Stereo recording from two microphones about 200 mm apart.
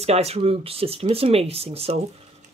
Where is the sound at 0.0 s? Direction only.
30° right (ahead or behind).